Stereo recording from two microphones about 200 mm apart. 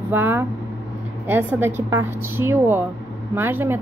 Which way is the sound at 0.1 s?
10° right (ahead or behind).